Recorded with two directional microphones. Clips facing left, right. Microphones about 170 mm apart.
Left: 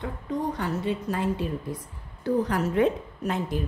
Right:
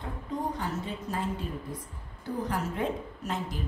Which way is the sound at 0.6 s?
70° left (ahead or behind).